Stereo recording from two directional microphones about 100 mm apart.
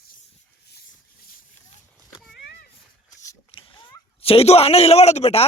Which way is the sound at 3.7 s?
45° left (ahead or behind).